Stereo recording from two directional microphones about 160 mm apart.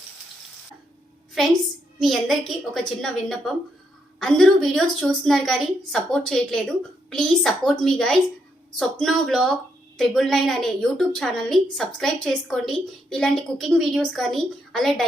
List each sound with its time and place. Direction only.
1.4 s a woman's voice: centre (ahead or behind)